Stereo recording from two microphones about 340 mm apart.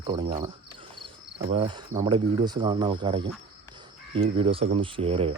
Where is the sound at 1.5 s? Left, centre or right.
Centre.